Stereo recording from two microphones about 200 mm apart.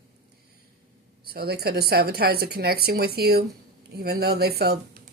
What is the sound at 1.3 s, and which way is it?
Speech, 50° right (ahead or behind).